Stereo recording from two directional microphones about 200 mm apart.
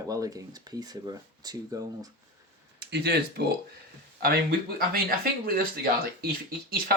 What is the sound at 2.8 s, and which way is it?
Speech, 55° right (ahead or behind).